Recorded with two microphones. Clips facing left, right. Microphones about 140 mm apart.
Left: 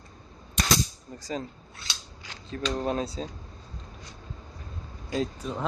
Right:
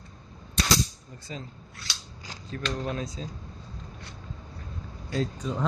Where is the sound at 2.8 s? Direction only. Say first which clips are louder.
Left 4 dB; 30° left (ahead or behind).